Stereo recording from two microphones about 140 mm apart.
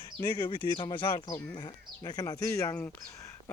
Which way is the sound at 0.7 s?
35° left (ahead or behind).